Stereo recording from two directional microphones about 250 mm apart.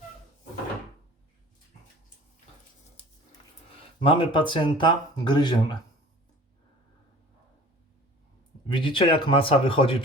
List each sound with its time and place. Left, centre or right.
4.0 s speech: left
8.7 s speech: centre